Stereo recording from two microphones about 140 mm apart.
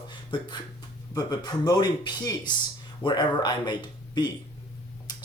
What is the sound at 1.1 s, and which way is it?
Speech, 25° left (ahead or behind).